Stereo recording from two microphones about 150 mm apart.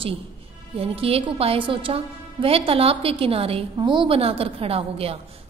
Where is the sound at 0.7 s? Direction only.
40° right (ahead or behind).